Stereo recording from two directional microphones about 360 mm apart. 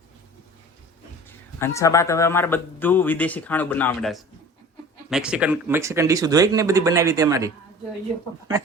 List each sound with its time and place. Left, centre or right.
1.5 s a man's voice: centre